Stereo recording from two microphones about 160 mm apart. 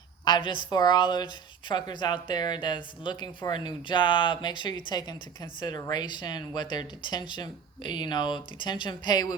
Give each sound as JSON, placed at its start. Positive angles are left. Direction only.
{"t": 0.3, "sound": "speech", "side_deg": 30}